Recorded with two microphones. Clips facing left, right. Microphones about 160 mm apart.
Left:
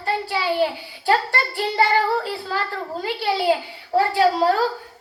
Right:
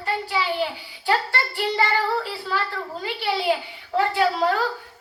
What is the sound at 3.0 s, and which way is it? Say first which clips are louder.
A child's voice: left 3 dB; 40° left (ahead or behind).